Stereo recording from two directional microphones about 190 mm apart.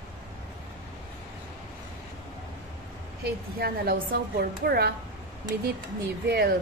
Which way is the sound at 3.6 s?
55° right (ahead or behind).